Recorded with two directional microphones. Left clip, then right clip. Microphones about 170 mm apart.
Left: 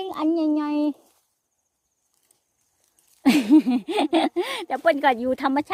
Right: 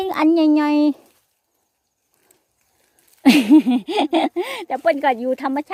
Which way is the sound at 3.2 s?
15° right (ahead or behind).